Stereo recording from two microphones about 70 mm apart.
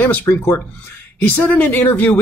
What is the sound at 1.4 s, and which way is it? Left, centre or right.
Speech, left.